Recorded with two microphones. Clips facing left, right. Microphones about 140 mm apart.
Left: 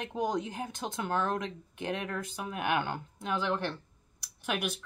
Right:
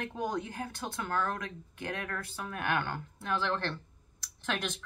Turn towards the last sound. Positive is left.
turn(degrees=10)  # may be behind; listen again after turning